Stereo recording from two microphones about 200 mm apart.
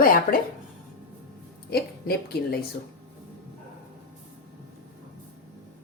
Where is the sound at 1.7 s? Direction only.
50° left (ahead or behind).